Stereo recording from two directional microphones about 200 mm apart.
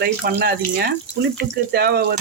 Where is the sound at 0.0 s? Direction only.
50° right (ahead or behind).